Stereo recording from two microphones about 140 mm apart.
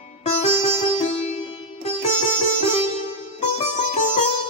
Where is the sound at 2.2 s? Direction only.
50° left (ahead or behind).